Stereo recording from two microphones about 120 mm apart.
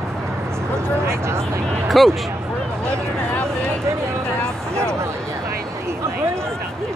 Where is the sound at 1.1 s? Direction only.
20° right (ahead or behind).